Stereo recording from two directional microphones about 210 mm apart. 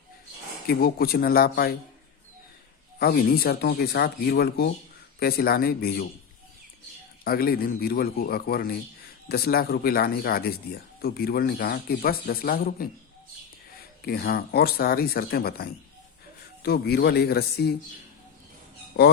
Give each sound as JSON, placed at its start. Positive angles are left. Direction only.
{"t": 0.7, "sound": "speech", "side_deg": 45}
{"t": 3.0, "sound": "speech", "side_deg": 45}
{"t": 7.3, "sound": "speech", "side_deg": 45}
{"t": 14.0, "sound": "speech", "side_deg": 45}